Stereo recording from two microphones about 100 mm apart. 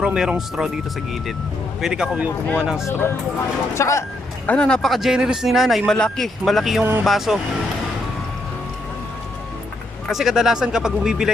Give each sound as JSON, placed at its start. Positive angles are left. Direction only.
{"t": 0.0, "sound": "speech", "side_deg": -10}
{"t": 1.8, "sound": "speech", "side_deg": -10}
{"t": 2.8, "sound": "speech", "side_deg": 25}
{"t": 4.4, "sound": "speech", "side_deg": 10}
{"t": 10.1, "sound": "speech", "side_deg": 0}